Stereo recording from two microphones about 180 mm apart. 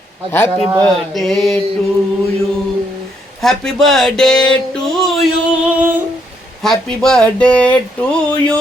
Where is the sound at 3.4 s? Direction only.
Centre (ahead or behind).